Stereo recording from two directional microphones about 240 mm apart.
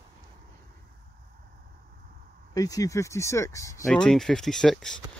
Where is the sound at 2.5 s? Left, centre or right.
Centre.